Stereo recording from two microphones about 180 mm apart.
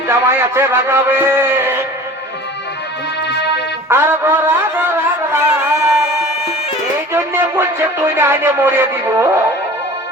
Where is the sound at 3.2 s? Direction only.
70° left (ahead or behind).